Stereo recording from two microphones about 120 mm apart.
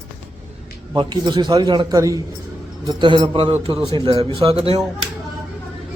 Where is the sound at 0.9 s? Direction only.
40° right (ahead or behind).